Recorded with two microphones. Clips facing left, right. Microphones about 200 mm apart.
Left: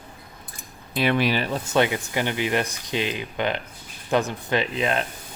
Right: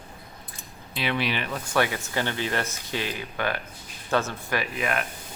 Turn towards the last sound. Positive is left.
turn(degrees=25)  # may be behind; listen again after turning